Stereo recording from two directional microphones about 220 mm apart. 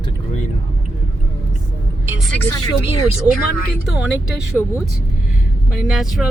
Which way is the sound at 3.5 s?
45° left (ahead or behind).